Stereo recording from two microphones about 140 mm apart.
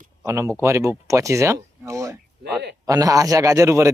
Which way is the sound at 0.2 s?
20° right (ahead or behind).